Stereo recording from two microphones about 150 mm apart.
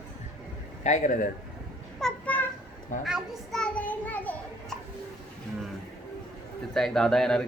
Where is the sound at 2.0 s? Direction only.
5° left (ahead or behind).